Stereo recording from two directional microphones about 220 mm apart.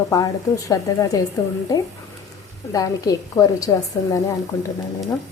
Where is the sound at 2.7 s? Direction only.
15° left (ahead or behind).